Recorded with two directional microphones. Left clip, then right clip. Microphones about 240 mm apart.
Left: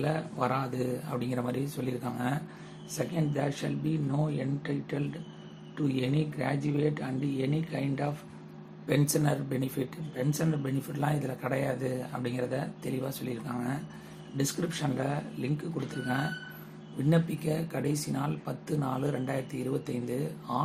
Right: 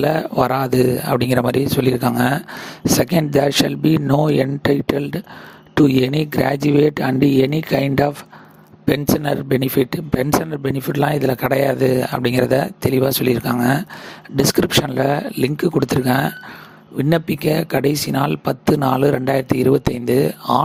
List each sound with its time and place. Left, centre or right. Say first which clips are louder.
0.0 s speech: right 14 dB; right
17.1 s speech: right 12 dB; right